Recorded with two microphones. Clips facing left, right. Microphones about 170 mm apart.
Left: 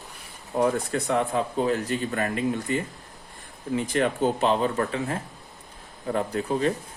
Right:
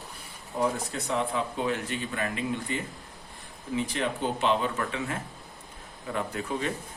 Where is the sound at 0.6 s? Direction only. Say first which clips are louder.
Left 5 dB; 55° left (ahead or behind).